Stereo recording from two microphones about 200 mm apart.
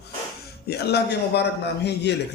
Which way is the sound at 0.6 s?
55° left (ahead or behind).